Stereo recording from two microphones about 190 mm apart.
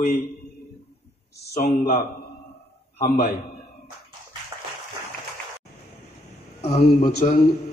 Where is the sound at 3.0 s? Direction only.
55° left (ahead or behind).